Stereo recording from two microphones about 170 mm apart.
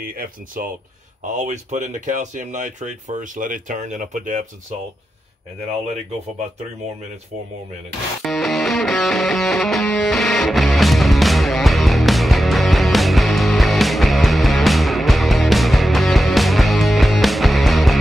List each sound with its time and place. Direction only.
0.0 s speech: 55° right (ahead or behind)
1.4 s speech: 45° right (ahead or behind)
8.2 s music: centre (ahead or behind)